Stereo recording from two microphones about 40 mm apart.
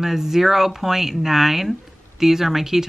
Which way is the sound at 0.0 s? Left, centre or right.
Centre.